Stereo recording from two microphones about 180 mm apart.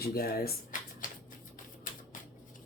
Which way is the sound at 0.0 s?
55° left (ahead or behind).